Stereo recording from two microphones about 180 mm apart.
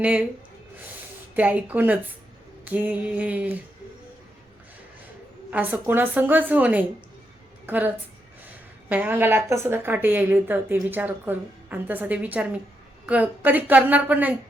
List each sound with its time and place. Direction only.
0.0 s a woman's voice: 5° right (ahead or behind)
1.4 s a woman's voice: 10° right (ahead or behind)
5.5 s a woman's voice: 10° right (ahead or behind)